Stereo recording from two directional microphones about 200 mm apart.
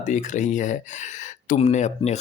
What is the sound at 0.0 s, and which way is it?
Speech, 40° left (ahead or behind).